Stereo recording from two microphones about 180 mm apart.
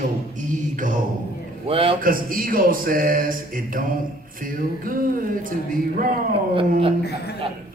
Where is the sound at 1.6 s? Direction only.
30° right (ahead or behind).